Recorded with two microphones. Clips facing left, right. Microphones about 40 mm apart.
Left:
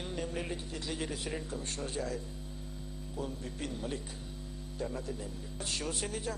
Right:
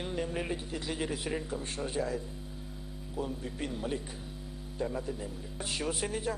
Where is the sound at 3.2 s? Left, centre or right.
Centre.